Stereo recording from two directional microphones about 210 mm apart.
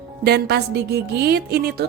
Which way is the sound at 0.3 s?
50° right (ahead or behind).